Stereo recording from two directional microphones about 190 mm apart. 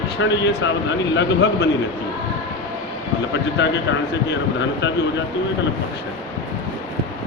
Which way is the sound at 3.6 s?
65° left (ahead or behind).